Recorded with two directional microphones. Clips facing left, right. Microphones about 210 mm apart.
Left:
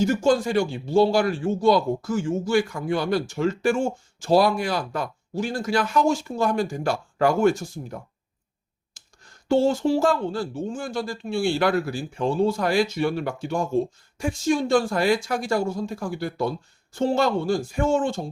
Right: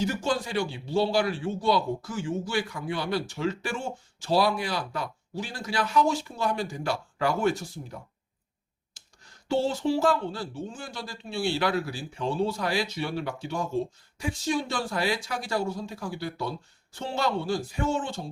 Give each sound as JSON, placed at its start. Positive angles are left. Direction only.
{"t": 0.0, "sound": "a man's voice", "side_deg": 45}